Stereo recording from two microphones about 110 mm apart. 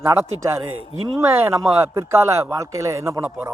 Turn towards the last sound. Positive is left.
turn(degrees=-25)  # may be behind; listen again after turning